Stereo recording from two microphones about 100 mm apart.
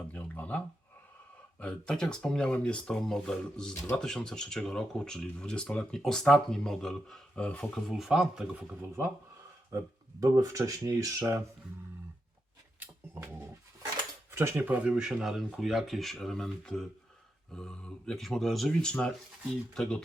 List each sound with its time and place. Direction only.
0.1 s a sound: 15° left (ahead or behind)
1.5 s speech: 10° left (ahead or behind)
7.9 s speech: 5° right (ahead or behind)
9.7 s speech: 30° right (ahead or behind)
14.3 s speech: 25° right (ahead or behind); by 20.0 s 10° left (ahead or behind)